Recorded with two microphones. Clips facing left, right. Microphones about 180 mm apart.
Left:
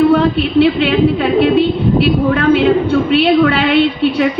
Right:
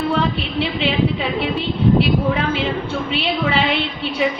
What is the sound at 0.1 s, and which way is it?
A woman's voice, 60° left (ahead or behind).